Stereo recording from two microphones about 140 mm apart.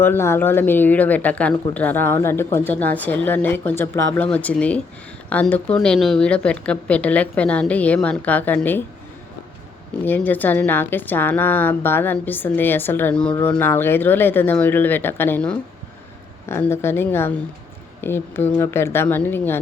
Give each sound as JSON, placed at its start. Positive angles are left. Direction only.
{"t": 0.0, "sound": "a woman's voice", "side_deg": 15}
{"t": 10.0, "sound": "a woman's voice", "side_deg": 10}